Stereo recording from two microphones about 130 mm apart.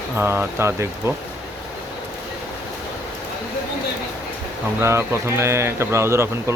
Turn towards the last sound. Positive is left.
turn(degrees=-20)  # may be behind; listen again after turning